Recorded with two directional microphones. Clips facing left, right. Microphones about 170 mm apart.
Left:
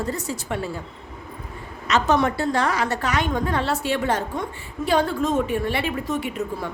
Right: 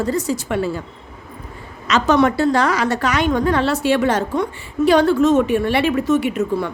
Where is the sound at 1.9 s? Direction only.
90° right.